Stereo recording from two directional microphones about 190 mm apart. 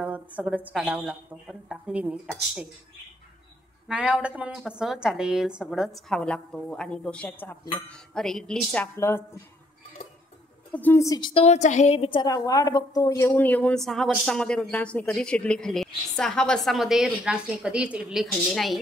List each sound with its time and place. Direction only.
0.0 s speech: 5° right (ahead or behind)
3.8 s speech: 5° right (ahead or behind); by 9.4 s 15° left (ahead or behind)
10.7 s a woman's voice: 10° left (ahead or behind)
13.3 s speech: 10° left (ahead or behind)